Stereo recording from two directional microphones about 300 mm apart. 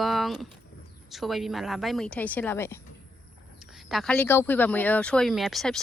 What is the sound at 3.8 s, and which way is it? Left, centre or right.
Speech, centre.